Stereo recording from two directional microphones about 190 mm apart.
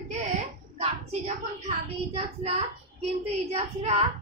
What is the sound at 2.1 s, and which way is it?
Speech, 35° right (ahead or behind).